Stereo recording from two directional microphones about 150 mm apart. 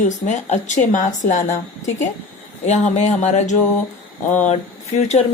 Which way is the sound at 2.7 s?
50° left (ahead or behind).